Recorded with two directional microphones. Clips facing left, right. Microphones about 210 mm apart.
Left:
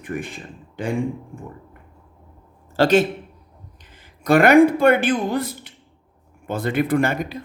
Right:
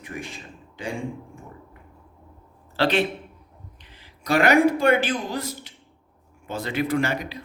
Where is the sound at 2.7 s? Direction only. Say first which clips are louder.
Left 6 dB; 45° left (ahead or behind).